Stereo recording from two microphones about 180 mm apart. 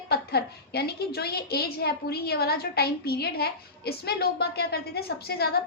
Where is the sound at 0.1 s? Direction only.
60° left (ahead or behind).